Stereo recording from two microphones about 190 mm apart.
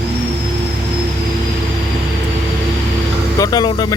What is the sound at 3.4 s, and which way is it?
Vehicle, 20° left (ahead or behind).